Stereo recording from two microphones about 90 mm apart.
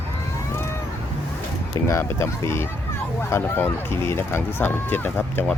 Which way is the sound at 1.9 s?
35° left (ahead or behind).